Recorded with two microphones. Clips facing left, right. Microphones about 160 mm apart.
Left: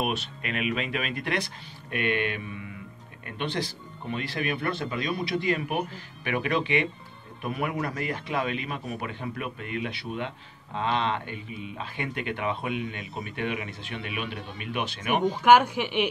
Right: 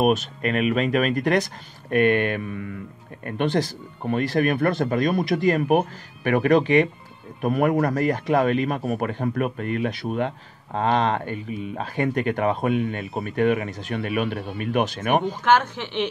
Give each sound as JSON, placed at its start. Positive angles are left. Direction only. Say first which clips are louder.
{"t": 0.0, "sound": "a man's voice", "louder": "right 10 dB", "side_deg": -45}
{"t": 15.4, "sound": "a woman's voice", "louder": "left 1 dB", "side_deg": 10}